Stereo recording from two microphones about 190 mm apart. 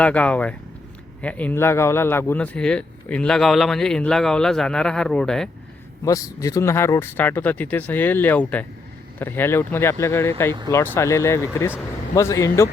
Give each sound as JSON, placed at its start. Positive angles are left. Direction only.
{"t": 0.0, "sound": "speech", "side_deg": 5}
{"t": 6.1, "sound": "speech", "side_deg": 20}